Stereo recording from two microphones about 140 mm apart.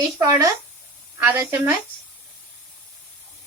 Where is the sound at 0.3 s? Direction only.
25° right (ahead or behind).